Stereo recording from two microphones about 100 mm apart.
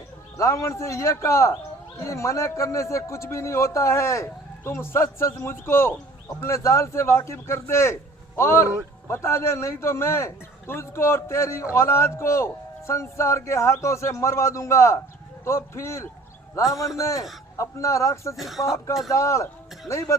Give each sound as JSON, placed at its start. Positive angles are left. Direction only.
{"t": 0.3, "sound": "a man's voice", "side_deg": 30}
{"t": 18.3, "sound": "speech", "side_deg": 0}
{"t": 19.0, "sound": "a man's voice", "side_deg": 30}